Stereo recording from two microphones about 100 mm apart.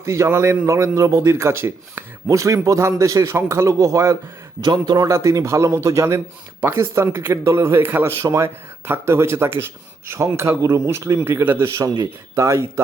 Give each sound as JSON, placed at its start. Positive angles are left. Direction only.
{"t": 0.0, "sound": "a man's voice", "side_deg": -30}
{"t": 4.6, "sound": "a man's voice", "side_deg": -45}